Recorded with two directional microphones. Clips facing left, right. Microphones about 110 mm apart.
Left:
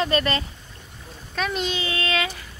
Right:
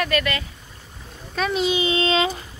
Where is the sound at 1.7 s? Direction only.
20° right (ahead or behind).